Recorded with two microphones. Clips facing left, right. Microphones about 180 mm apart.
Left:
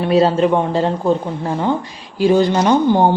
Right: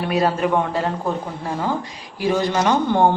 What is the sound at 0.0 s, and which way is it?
A man's voice, 25° left (ahead or behind).